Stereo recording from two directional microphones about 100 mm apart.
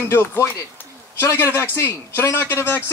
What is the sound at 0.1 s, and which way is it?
Speech, 25° left (ahead or behind).